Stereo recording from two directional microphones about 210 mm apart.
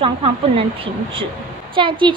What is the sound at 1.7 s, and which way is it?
Speech, 25° right (ahead or behind).